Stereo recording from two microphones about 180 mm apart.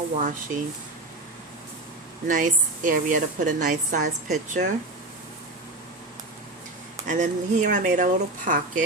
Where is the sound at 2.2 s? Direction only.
45° right (ahead or behind).